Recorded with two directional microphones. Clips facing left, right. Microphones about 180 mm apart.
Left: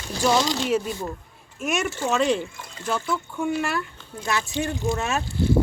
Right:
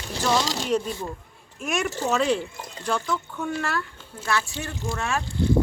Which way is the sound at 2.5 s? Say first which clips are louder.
Right 2 dB; 35° right (ahead or behind).